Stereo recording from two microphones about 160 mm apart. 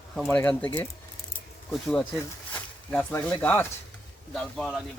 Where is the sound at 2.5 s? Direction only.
10° left (ahead or behind).